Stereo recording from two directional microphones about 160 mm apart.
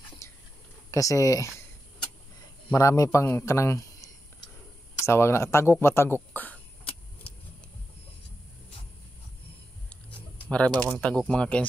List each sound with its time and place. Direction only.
0.2 s whispering: 15° left (ahead or behind)
0.9 s a man's voice: 20° left (ahead or behind)
2.7 s a man's voice: 20° left (ahead or behind)
10.3 s typing: 10° left (ahead or behind)
11.0 s speech: 5° left (ahead or behind)